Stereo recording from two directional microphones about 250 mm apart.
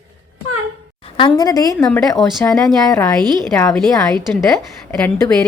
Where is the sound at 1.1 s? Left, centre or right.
Centre.